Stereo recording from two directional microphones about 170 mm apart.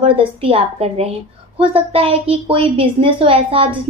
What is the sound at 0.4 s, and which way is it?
A woman's voice, 35° right (ahead or behind).